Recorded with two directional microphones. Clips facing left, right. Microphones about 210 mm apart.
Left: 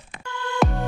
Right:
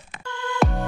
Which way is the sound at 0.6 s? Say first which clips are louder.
Even; centre (ahead or behind).